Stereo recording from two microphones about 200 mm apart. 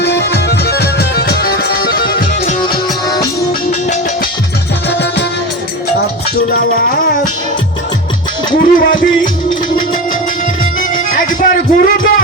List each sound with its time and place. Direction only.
0.0 s music: 55° left (ahead or behind)
3.7 s music: 35° left (ahead or behind)
6.5 s music: 45° left (ahead or behind)
8.5 s music: 45° left (ahead or behind)
10.8 s music: 45° left (ahead or behind)